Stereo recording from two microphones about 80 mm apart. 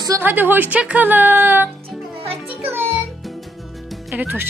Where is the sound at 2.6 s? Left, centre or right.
Right.